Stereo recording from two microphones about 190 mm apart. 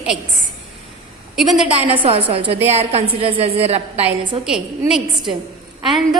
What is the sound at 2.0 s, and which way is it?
A woman's voice, 30° right (ahead or behind).